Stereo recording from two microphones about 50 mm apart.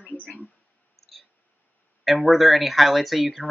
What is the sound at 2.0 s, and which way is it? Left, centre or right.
Speech, centre.